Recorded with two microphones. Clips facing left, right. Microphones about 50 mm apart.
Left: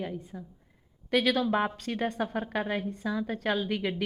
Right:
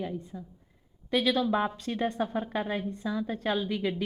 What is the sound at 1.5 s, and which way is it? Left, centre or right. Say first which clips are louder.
Speech: even; left.